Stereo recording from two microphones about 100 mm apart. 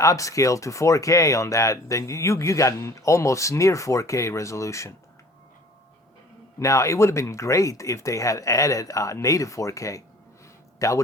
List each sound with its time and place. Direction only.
0.0 s speech: 35° left (ahead or behind)
6.6 s speech: 30° left (ahead or behind)